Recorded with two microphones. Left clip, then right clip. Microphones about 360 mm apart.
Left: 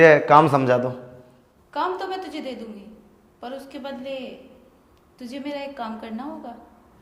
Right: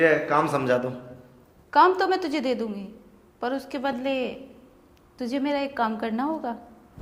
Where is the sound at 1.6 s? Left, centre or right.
Right.